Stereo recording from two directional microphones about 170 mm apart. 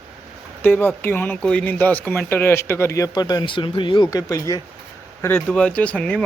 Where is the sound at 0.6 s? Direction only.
10° left (ahead or behind).